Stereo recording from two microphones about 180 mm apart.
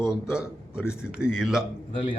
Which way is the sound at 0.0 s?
5° right (ahead or behind).